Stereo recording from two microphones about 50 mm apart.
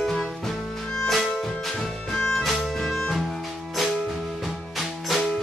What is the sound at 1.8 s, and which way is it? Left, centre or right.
Music, centre.